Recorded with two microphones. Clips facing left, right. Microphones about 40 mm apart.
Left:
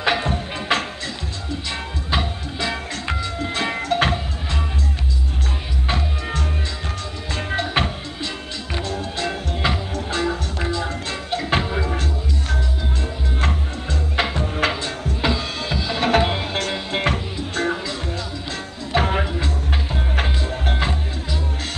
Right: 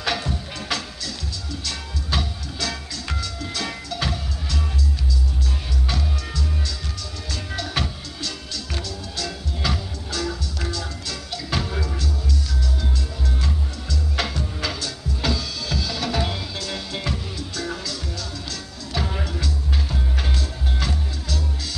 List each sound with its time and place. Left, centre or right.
0.0 s music: left
0.3 s music: left
5.9 s music: left
13.4 s music: left
14.1 s music: left
18.9 s music: left